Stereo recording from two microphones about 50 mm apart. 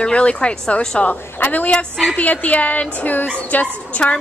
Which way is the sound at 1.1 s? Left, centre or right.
Left.